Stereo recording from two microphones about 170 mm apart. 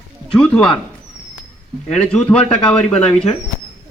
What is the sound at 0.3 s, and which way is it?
Speech, 5° left (ahead or behind).